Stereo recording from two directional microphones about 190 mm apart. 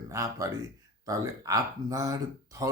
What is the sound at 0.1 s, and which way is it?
Speech, 15° right (ahead or behind).